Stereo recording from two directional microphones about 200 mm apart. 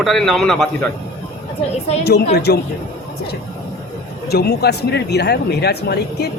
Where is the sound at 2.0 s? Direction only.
55° left (ahead or behind).